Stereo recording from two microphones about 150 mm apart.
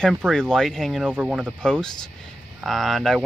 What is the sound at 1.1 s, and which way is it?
Speech, 10° right (ahead or behind).